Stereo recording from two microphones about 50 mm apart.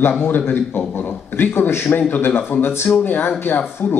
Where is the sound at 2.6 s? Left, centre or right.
Left.